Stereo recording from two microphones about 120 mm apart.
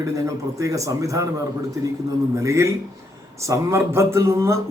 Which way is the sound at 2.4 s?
25° right (ahead or behind).